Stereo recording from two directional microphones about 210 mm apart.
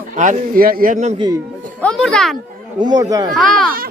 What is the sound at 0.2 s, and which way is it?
Speech, 40° right (ahead or behind).